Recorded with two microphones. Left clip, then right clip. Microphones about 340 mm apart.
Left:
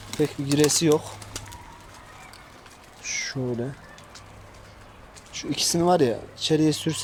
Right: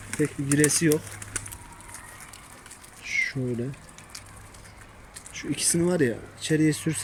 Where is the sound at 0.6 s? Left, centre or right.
Left.